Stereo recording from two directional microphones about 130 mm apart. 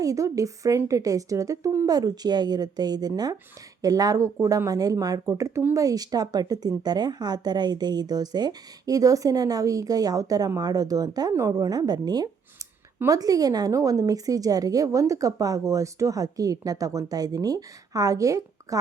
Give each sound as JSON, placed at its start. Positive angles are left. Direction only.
{"t": 0.0, "sound": "speech", "side_deg": -25}